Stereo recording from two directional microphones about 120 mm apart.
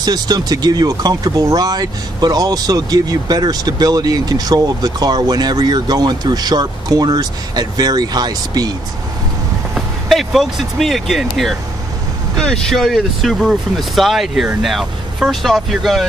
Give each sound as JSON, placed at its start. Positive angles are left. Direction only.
{"t": 0.0, "sound": "speech", "side_deg": -35}
{"t": 9.8, "sound": "speech", "side_deg": 0}
{"t": 12.4, "sound": "speech", "side_deg": 5}